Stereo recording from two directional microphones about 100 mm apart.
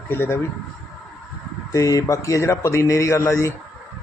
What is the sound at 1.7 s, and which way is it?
Speech, 35° left (ahead or behind).